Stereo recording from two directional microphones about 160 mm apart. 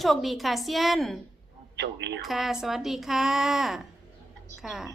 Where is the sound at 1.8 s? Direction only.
90° right.